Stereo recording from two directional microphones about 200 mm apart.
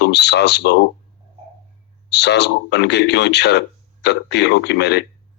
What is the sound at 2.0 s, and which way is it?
A man's voice, 60° left (ahead or behind).